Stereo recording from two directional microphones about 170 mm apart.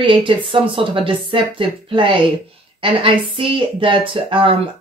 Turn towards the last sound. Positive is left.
turn(degrees=-30)  # may be behind; listen again after turning